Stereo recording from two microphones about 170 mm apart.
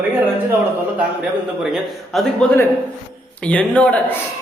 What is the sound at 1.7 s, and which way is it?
Speech, centre (ahead or behind).